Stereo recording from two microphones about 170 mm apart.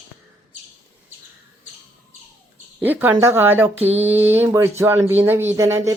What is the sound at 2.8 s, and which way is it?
Speech, 10° right (ahead or behind).